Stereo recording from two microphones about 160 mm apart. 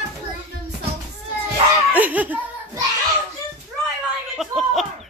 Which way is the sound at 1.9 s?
10° right (ahead or behind).